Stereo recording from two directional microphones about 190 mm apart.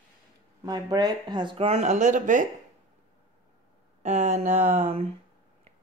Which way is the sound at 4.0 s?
40° right (ahead or behind).